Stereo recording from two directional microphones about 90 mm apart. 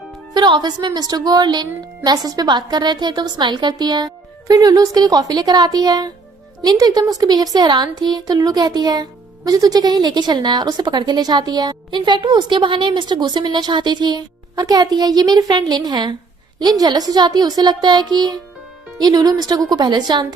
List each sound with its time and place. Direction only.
0.3 s a woman's voice: 55° right (ahead or behind)